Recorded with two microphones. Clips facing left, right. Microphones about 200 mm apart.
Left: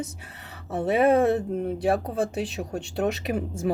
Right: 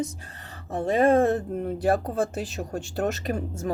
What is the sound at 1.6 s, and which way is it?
Speech, centre (ahead or behind).